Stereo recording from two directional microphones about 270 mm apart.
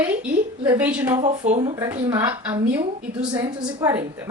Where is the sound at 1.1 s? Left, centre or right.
Right.